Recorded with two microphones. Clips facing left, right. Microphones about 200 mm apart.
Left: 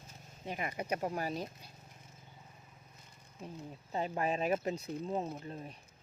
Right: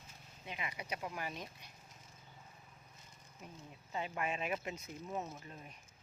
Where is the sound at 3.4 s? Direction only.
30° left (ahead or behind).